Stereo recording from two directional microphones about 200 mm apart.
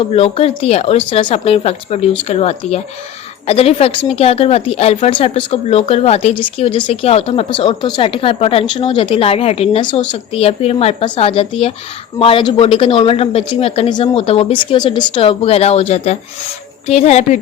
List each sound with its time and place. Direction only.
0.0 s a woman's voice: 30° left (ahead or behind)